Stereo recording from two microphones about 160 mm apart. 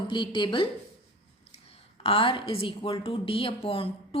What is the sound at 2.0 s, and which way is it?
A woman's voice, 35° left (ahead or behind).